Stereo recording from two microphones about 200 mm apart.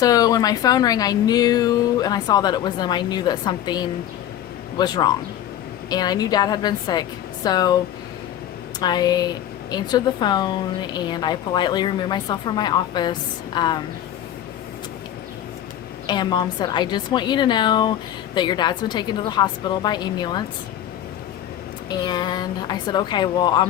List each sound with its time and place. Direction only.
0.0 s speech: 20° left (ahead or behind)
8.8 s speech: 20° left (ahead or behind)
16.0 s speech: 20° left (ahead or behind)
22.0 s speech: 20° left (ahead or behind)